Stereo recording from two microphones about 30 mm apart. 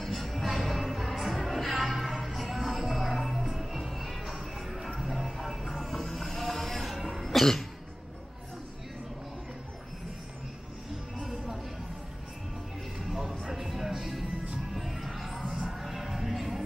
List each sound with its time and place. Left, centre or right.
0.2 s music: centre
11.1 s music: centre
13.0 s music: centre
15.4 s a sound: centre
15.7 s music: centre